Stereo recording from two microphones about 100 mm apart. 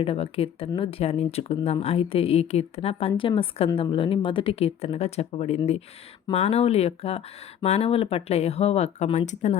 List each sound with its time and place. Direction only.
0.0 s speech: 70° left (ahead or behind); by 3.1 s 90° left
3.2 s speech: 60° left (ahead or behind); by 9.1 s 90° left